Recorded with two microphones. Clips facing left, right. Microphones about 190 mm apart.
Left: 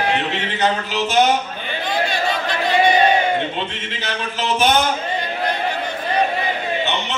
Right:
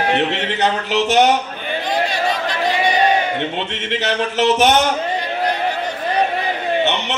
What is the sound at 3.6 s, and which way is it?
Speech, 70° right (ahead or behind).